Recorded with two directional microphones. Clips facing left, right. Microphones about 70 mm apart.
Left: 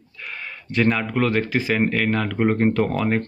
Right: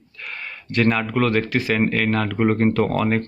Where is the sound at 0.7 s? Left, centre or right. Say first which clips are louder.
Right 1 dB; centre.